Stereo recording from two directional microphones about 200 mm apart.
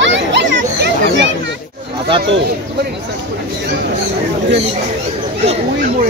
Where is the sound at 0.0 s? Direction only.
65° right (ahead or behind).